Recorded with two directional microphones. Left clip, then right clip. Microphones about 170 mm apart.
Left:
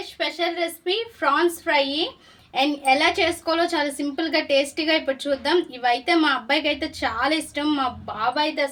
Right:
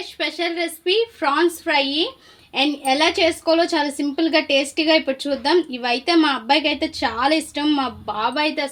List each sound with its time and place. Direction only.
0.2 s a woman's voice: 55° right (ahead or behind)